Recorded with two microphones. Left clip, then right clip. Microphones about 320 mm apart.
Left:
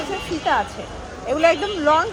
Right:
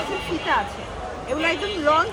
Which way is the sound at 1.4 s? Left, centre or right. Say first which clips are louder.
Left 5 dB; left.